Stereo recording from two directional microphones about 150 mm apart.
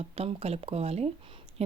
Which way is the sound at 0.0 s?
40° right (ahead or behind).